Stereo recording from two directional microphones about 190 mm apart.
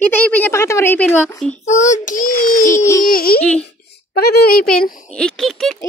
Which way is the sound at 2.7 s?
15° left (ahead or behind).